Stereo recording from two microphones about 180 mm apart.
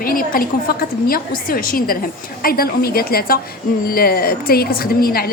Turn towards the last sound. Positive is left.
turn(degrees=55)  # may be behind; listen again after turning